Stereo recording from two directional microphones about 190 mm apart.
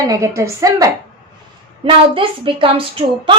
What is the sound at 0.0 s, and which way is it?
Speech, 15° right (ahead or behind).